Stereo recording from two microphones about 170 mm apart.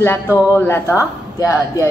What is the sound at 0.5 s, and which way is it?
Speech, 15° left (ahead or behind).